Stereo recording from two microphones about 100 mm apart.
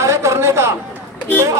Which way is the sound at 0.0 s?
30° right (ahead or behind).